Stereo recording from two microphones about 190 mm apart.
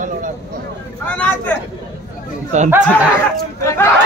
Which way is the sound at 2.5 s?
40° right (ahead or behind).